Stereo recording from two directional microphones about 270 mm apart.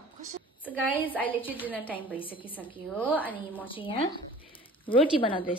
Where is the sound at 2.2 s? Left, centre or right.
Centre.